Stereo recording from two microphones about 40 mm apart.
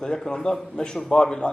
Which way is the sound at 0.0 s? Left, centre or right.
Centre.